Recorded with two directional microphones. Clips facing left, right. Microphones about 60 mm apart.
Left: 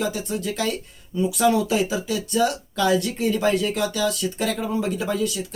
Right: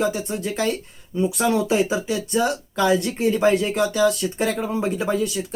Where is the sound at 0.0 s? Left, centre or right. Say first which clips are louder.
Right 2 dB; right.